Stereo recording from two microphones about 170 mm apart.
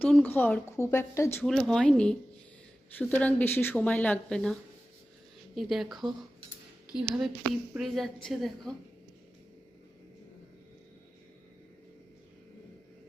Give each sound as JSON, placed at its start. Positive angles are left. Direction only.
{"t": 0.0, "sound": "speech", "side_deg": 10}
{"t": 1.5, "sound": "a woman's voice", "side_deg": 0}
{"t": 5.5, "sound": "a woman's voice", "side_deg": 0}